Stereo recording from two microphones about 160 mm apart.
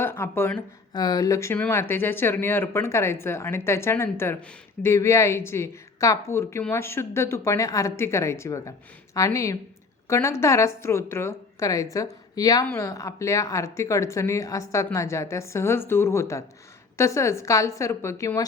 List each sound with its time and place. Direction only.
0.0 s speech: 15° left (ahead or behind)
0.9 s a woman's voice: 25° left (ahead or behind)